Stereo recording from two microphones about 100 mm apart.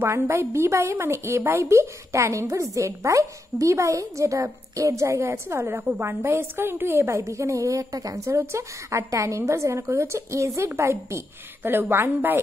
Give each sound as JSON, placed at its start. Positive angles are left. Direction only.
{"t": 0.0, "sound": "a woman's voice", "side_deg": -25}